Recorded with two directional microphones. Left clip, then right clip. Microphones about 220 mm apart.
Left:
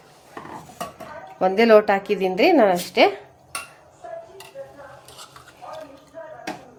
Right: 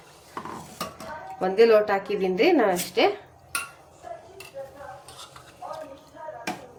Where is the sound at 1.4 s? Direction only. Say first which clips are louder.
Left 3 dB; 45° left (ahead or behind).